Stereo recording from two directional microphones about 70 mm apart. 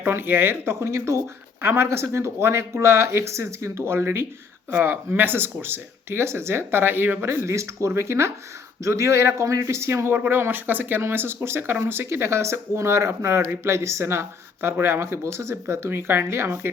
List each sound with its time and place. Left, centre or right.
0.0 s speech: right
7.3 s speech: right